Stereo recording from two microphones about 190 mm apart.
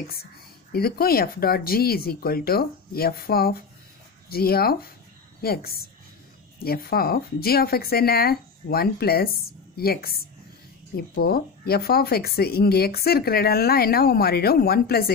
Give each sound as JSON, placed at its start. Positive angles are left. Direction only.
{"t": 0.7, "sound": "speech", "side_deg": 55}